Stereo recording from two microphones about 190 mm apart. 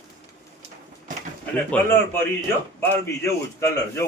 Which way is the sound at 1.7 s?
10° left (ahead or behind).